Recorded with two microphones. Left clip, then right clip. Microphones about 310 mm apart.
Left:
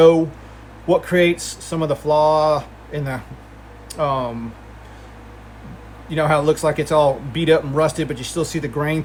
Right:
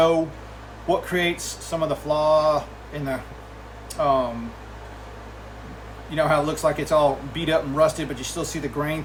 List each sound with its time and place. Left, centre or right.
0.9 s speech: left
6.1 s speech: left